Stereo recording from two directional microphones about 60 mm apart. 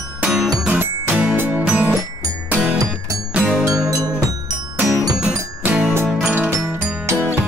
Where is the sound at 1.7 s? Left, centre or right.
Right.